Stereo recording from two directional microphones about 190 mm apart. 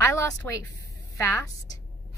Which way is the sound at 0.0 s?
15° left (ahead or behind).